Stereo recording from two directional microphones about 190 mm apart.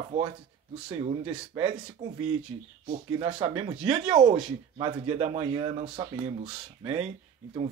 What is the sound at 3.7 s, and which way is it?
Speech, 5° right (ahead or behind).